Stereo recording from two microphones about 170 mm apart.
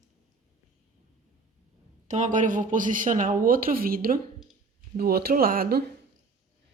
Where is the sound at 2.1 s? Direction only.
45° right (ahead or behind); by 5.9 s 65° right (ahead or behind).